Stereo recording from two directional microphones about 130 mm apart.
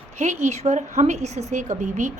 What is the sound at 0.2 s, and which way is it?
A woman's voice, 60° right (ahead or behind).